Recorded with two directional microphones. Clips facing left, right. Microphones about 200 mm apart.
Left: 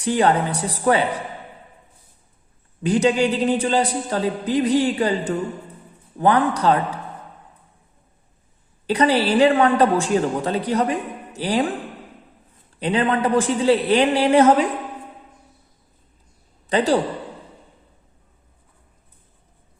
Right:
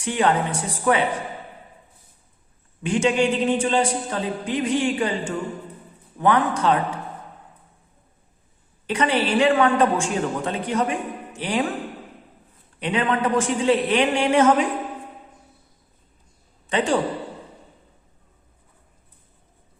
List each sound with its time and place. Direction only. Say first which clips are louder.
0.0 s a woman's voice: left 3 dB; 35° left (ahead or behind)
2.8 s a woman's voice: left 2 dB; 35° left (ahead or behind)
8.9 s a woman's voice: left 3 dB; 35° left (ahead or behind)
12.8 s a woman's voice: left 2 dB; 35° left (ahead or behind)
16.6 s a woman's voice: left 3 dB; 35° left (ahead or behind)